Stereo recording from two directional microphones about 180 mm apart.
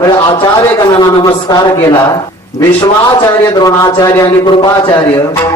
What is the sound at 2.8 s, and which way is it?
A man's voice, 20° left (ahead or behind).